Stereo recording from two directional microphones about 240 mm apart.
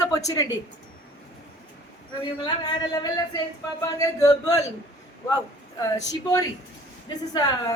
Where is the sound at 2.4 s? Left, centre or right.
Centre.